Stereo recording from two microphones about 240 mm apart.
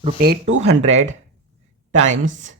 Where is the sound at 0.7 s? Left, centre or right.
Right.